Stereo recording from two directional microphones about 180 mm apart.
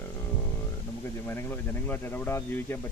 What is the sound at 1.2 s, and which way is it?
Speech, 10° left (ahead or behind).